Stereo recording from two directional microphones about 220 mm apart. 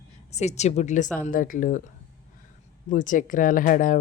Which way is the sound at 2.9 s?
35° left (ahead or behind).